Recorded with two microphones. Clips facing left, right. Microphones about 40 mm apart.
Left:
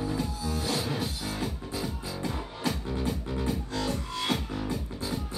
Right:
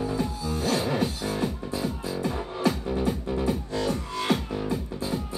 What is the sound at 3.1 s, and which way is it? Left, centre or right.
Music, right.